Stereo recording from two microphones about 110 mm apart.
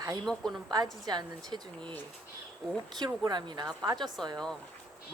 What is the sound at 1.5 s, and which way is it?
Speech, 40° right (ahead or behind).